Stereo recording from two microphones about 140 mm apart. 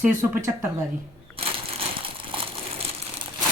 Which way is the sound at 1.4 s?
40° right (ahead or behind).